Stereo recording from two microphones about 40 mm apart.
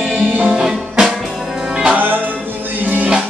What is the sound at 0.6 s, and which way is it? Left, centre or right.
Music, centre.